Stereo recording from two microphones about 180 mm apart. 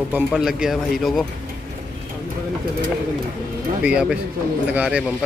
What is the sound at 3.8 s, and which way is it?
Speech, 5° right (ahead or behind).